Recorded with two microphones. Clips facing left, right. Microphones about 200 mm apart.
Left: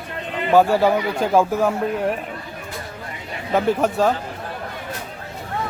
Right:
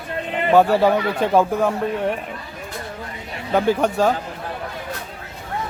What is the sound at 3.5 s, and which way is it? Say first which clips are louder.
Speech: right 1 dB; centre (ahead or behind).